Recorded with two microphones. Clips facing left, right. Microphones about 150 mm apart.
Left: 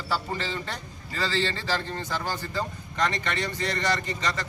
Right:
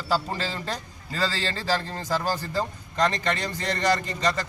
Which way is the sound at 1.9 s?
40° right (ahead or behind).